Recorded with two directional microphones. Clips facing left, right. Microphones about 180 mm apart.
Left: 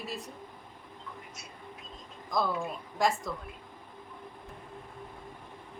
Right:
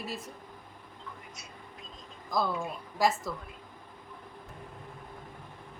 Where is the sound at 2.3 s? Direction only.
Centre (ahead or behind).